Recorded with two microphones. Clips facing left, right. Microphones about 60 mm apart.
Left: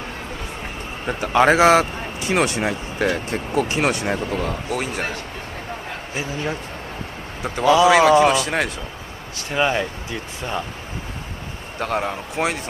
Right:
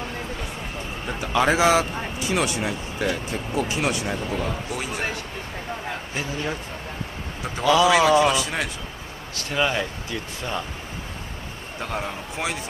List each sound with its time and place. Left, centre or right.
1.0 s speech: left
7.6 s speech: left
7.9 s a man's voice: left
9.5 s speech: centre
11.8 s speech: left